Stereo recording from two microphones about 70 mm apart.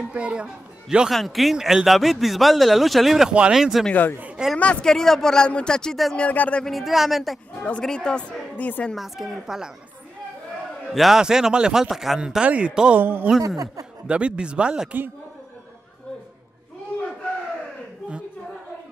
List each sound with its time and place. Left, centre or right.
0.1 s speech: centre
1.1 s speech: centre
4.8 s speech: centre
6.1 s speech: left
6.6 s speech: centre
7.5 s speech: centre
8.9 s speech: centre
10.9 s speech: centre
13.0 s speech: right
14.0 s speech: centre